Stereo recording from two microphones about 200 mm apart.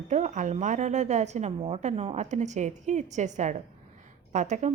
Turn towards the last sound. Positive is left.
turn(degrees=-35)  # may be behind; listen again after turning